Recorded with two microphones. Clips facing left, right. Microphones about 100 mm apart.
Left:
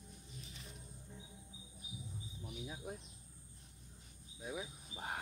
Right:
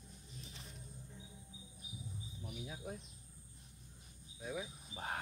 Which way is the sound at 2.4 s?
5° left (ahead or behind).